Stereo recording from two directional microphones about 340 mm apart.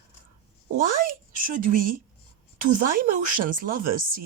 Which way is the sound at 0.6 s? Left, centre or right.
Right.